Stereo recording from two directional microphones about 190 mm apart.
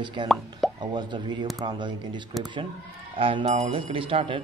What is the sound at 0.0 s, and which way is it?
A man's voice, 25° right (ahead or behind).